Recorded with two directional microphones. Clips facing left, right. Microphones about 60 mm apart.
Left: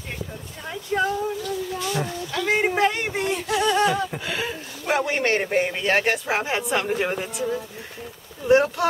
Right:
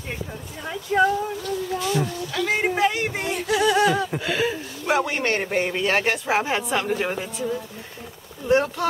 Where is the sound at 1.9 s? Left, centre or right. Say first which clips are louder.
Right 2 dB; centre.